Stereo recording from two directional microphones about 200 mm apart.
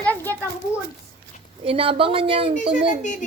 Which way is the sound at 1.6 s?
25° right (ahead or behind).